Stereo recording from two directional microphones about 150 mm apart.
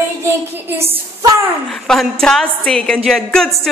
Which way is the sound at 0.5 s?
15° right (ahead or behind).